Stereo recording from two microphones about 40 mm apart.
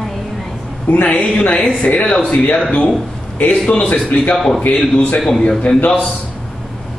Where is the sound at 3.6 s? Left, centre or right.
Left.